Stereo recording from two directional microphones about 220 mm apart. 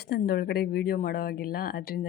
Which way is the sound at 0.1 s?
45° left (ahead or behind).